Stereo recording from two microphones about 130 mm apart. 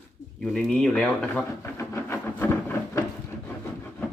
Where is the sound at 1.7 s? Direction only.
20° left (ahead or behind).